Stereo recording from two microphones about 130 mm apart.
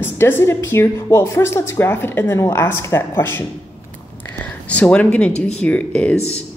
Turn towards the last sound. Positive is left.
turn(degrees=10)  # may be behind; listen again after turning